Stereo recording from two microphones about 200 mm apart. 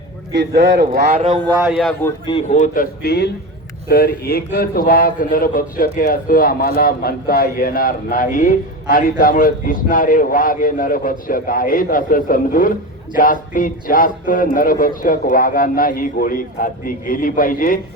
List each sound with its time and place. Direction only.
0.3 s speech: 65° right (ahead or behind)
1.2 s speech: 30° right (ahead or behind)
1.7 s speech: 5° left (ahead or behind)
2.2 s a man's voice: 30° left (ahead or behind)